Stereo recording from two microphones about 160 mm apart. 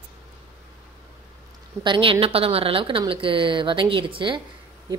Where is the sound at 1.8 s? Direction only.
30° right (ahead or behind).